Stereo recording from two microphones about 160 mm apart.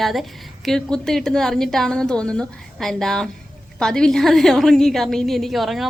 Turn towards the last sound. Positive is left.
turn(degrees=0)  # may be behind; listen again after turning